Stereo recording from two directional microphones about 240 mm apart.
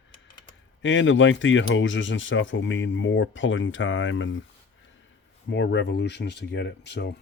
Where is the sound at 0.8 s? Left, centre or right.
Left.